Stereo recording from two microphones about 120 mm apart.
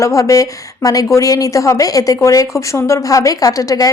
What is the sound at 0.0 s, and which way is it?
A woman's voice, 25° left (ahead or behind).